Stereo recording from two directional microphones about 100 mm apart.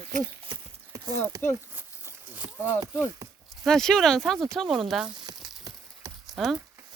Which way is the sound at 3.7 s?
5° left (ahead or behind).